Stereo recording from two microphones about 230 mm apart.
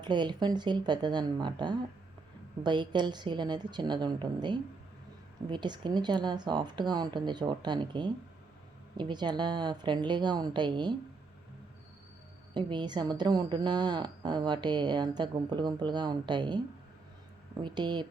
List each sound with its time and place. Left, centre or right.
0.0 s a woman's voice: centre
12.5 s a woman's voice: centre
17.6 s a woman's voice: centre